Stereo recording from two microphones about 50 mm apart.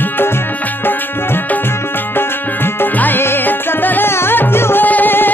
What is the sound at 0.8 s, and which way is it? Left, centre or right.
Music, left.